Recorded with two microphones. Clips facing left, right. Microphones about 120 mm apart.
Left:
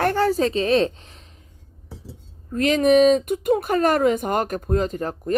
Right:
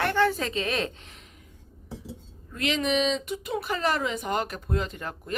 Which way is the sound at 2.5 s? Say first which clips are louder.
Left 10 dB; 45° left (ahead or behind).